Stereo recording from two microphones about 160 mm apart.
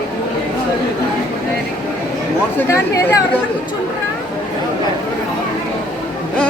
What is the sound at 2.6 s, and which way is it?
Speech, 20° left (ahead or behind).